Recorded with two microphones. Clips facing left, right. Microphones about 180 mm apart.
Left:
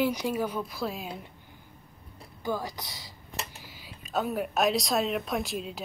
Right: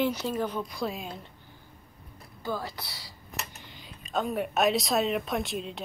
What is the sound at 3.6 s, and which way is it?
A woman's voice, 5° left (ahead or behind).